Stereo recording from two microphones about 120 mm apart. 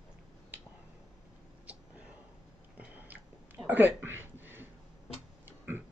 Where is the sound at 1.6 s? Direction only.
10° right (ahead or behind).